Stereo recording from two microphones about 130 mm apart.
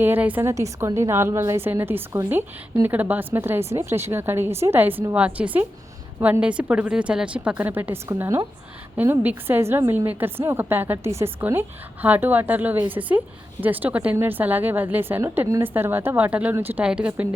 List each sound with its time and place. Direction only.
0.0 s a woman's voice: 15° right (ahead or behind)
0.5 s a woman's voice: 25° right (ahead or behind)